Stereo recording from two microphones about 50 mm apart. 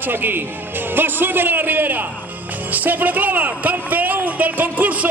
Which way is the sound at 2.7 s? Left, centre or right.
Right.